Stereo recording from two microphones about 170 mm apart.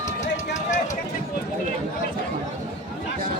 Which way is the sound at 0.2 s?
45° left (ahead or behind).